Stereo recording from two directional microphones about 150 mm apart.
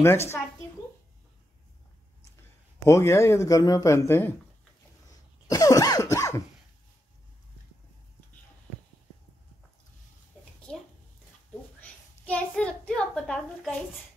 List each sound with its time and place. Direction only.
0.0 s a woman's voice: 15° left (ahead or behind)
2.8 s speech: 15° left (ahead or behind)
5.5 s cough: 25° left (ahead or behind)
10.7 s a sound: 5° left (ahead or behind)